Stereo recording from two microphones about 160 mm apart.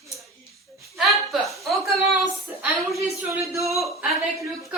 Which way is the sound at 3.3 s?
20° right (ahead or behind).